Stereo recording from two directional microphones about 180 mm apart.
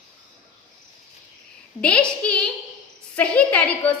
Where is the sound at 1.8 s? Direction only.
5° left (ahead or behind).